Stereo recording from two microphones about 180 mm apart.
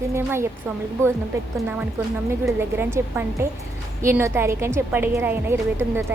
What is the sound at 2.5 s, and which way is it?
A woman's voice, 15° right (ahead or behind).